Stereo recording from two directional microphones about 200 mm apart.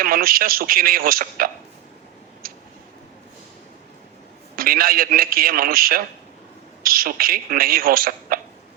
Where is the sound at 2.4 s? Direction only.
45° right (ahead or behind).